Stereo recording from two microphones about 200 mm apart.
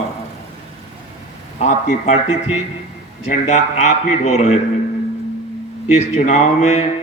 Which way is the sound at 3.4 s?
35° left (ahead or behind).